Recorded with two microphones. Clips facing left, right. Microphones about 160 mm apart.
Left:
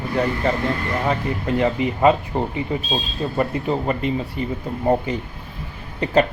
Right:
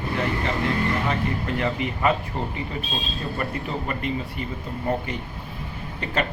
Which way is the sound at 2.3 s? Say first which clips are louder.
Left 6 dB; 35° left (ahead or behind).